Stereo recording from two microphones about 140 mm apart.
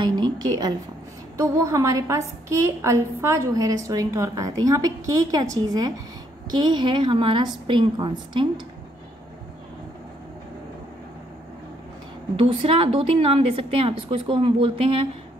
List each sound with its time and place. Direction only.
0.0 s a sound: 30° right (ahead or behind)
1.3 s a woman's voice: 20° right (ahead or behind)
12.4 s a woman's voice: 40° right (ahead or behind)